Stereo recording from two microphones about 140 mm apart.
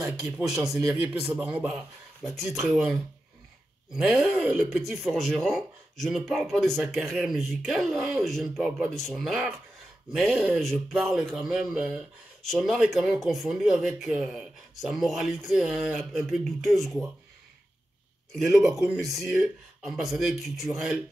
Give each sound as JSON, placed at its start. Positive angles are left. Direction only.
{"t": 0.4, "sound": "a man's voice", "side_deg": -15}
{"t": 18.3, "sound": "speech", "side_deg": 0}